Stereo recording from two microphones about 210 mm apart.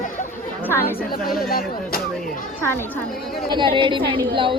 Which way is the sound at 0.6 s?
10° left (ahead or behind).